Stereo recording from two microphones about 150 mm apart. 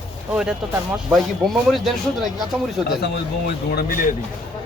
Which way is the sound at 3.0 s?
90° left.